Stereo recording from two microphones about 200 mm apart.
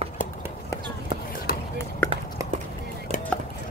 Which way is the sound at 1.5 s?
45° left (ahead or behind).